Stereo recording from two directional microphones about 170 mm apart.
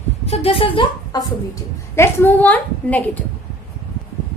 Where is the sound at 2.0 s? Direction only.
15° left (ahead or behind).